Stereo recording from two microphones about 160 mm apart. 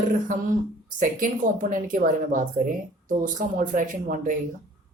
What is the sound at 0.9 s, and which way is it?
Speech, 55° right (ahead or behind).